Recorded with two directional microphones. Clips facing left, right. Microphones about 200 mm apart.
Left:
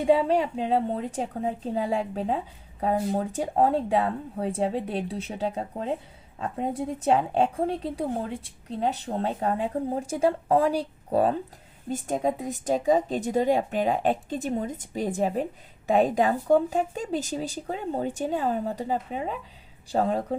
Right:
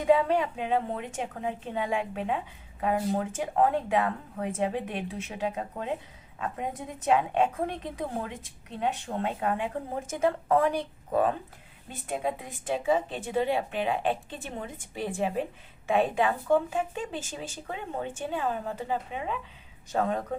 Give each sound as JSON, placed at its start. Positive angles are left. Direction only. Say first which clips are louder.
{"t": 0.0, "sound": "a woman's voice", "louder": "left 2 dB", "side_deg": 30}